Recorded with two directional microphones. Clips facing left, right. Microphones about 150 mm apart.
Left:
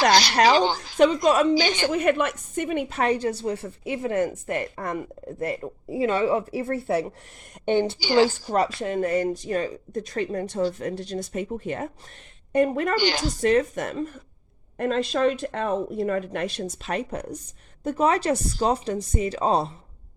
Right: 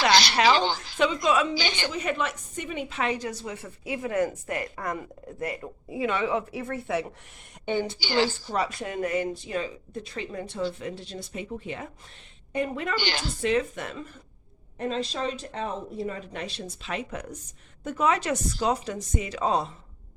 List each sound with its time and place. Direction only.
0.0 s speech: 45° left (ahead or behind)
3.2 s a woman's voice: 30° left (ahead or behind)
7.6 s speech: 60° left (ahead or behind)
8.2 s speech: 45° left (ahead or behind)
8.9 s speech: 35° left (ahead or behind)
14.8 s speech: 60° left (ahead or behind); by 19.7 s 35° left (ahead or behind)